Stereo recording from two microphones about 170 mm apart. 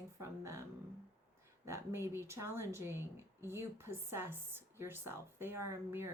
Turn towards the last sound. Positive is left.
turn(degrees=-15)  # may be behind; listen again after turning